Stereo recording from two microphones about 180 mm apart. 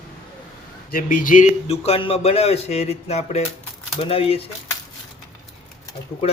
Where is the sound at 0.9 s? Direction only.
50° left (ahead or behind); by 4.4 s 30° left (ahead or behind).